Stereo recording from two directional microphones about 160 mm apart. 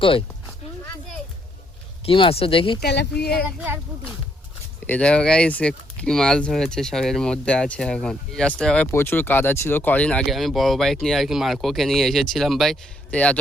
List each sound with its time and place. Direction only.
0.0 s speech: 35° left (ahead or behind)
2.0 s speech: 35° left (ahead or behind)
2.8 s speech: 90° left
4.9 s speech: 5° left (ahead or behind)